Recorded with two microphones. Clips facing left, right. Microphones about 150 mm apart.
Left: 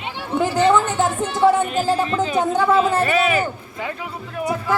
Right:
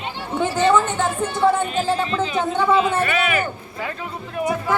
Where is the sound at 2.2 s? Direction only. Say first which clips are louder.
Left 2 dB; 45° left (ahead or behind).